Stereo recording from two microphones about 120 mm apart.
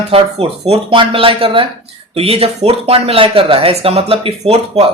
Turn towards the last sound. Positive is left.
turn(degrees=-55)  # may be behind; listen again after turning